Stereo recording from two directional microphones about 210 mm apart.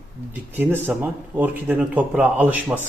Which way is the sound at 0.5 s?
10° right (ahead or behind).